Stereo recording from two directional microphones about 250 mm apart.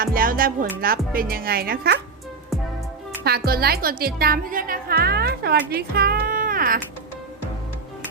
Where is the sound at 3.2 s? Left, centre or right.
Right.